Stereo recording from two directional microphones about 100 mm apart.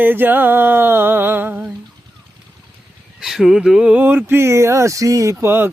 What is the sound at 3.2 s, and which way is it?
Speech, 5° right (ahead or behind).